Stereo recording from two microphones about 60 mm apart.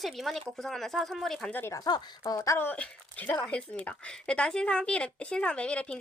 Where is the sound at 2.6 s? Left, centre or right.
Left.